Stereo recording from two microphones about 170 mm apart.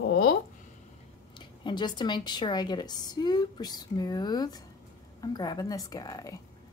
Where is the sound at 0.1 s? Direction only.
70° left (ahead or behind).